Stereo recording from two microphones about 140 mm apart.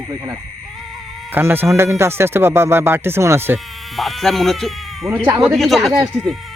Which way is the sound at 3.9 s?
Centre (ahead or behind).